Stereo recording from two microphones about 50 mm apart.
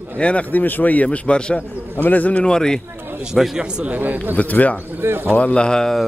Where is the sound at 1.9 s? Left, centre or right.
Left.